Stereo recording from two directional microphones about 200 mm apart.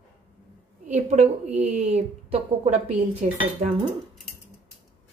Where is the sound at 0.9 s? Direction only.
35° right (ahead or behind).